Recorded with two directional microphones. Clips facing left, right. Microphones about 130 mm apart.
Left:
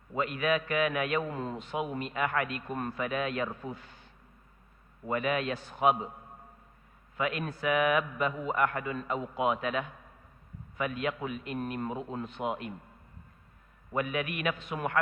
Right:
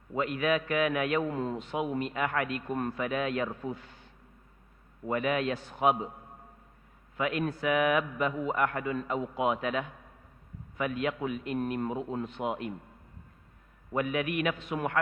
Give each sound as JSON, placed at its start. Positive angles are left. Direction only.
{"t": 0.1, "sound": "a man's voice", "side_deg": -20}
{"t": 5.0, "sound": "a man's voice", "side_deg": -25}
{"t": 7.2, "sound": "a man's voice", "side_deg": -25}
{"t": 13.9, "sound": "a man's voice", "side_deg": -20}